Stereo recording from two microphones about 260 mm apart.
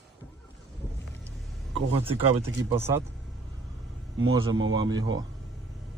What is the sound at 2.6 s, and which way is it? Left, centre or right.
Speech, centre.